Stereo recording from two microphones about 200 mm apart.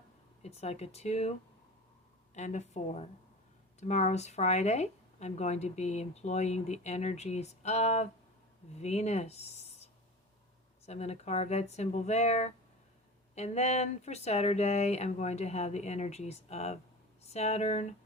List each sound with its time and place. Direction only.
0.4 s speech: 35° left (ahead or behind)